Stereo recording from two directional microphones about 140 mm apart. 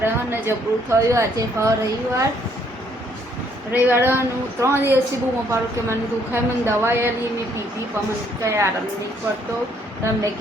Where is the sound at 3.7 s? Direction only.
15° right (ahead or behind).